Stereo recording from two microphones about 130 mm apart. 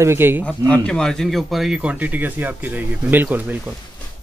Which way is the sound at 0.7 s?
5° left (ahead or behind).